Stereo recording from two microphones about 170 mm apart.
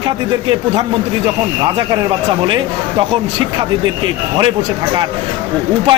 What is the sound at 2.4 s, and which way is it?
Speech, 25° right (ahead or behind).